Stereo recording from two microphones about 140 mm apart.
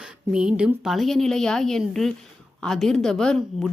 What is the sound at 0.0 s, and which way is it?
A woman's voice, 5° right (ahead or behind).